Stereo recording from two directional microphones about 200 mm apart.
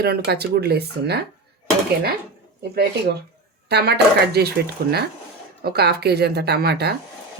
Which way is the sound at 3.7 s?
55° right (ahead or behind).